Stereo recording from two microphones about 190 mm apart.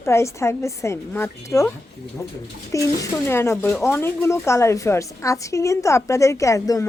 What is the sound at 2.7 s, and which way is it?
Speech, 15° left (ahead or behind).